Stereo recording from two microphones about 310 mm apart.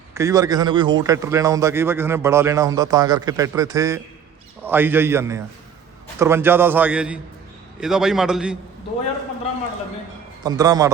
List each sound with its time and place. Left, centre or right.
0.1 s a man's voice: centre
10.4 s a man's voice: centre